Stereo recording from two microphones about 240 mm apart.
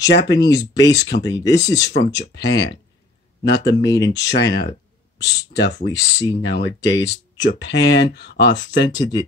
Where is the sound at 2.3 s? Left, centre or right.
Left.